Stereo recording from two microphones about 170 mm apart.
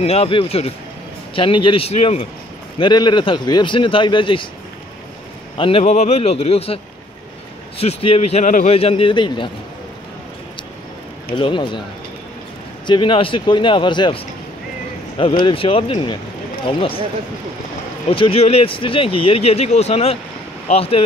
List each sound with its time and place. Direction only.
0.0 s speech: 35° left (ahead or behind)
2.8 s speech: 25° left (ahead or behind)
5.6 s speech: 35° left (ahead or behind)
11.3 s speech: 30° left (ahead or behind)
12.8 s speech: 30° left (ahead or behind)
18.1 s speech: 35° left (ahead or behind)